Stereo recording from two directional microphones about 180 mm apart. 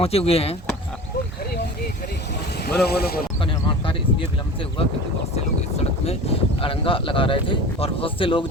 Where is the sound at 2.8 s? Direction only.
60° left (ahead or behind).